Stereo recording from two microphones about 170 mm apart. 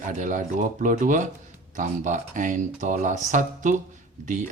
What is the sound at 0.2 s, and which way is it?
Speech, 45° right (ahead or behind).